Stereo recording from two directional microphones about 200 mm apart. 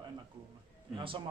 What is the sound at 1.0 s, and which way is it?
Speech, 25° right (ahead or behind).